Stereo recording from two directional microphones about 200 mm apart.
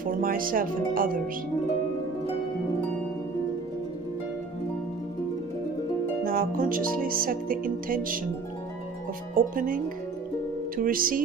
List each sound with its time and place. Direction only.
0.0 s music: 45° right (ahead or behind)
6.2 s music: 45° right (ahead or behind)
9.3 s music: 45° right (ahead or behind)
10.8 s music: 45° right (ahead or behind)